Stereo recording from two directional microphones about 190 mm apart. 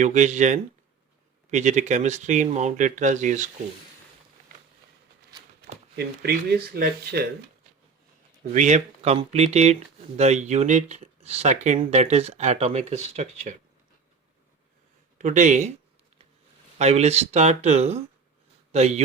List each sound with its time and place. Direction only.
0.0 s speech: 40° right (ahead or behind)
6.0 s speech: 55° right (ahead or behind)
8.5 s speech: 40° right (ahead or behind)
15.2 s speech: 40° right (ahead or behind)
16.7 s speech: 35° right (ahead or behind)